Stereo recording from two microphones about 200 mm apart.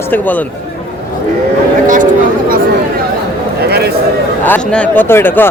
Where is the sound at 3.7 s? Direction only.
50° right (ahead or behind).